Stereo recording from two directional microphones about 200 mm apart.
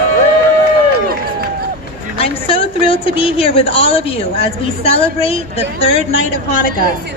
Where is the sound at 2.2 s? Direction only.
30° left (ahead or behind).